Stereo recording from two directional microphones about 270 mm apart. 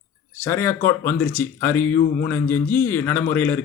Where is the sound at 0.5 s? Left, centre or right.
Centre.